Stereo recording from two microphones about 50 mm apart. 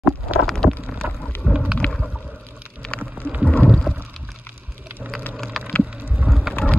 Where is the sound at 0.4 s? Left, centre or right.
Centre.